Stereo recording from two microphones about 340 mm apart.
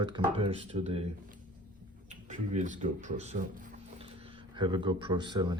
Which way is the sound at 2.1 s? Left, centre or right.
Right.